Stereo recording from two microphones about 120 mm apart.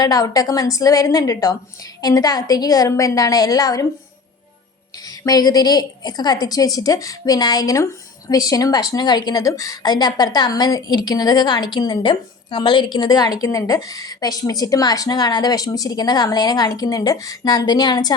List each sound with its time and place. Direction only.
0.0 s a woman's voice: 30° left (ahead or behind)
5.0 s a woman's voice: 30° left (ahead or behind)